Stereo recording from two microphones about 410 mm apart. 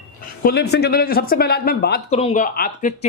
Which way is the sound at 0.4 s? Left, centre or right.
Left.